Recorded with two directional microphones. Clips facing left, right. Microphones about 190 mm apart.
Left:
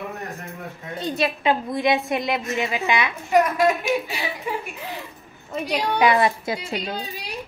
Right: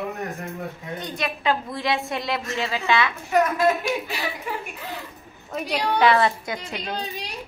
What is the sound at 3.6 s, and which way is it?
Speech, 5° left (ahead or behind).